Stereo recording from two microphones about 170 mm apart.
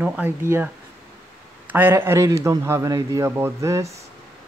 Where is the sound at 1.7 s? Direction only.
10° right (ahead or behind).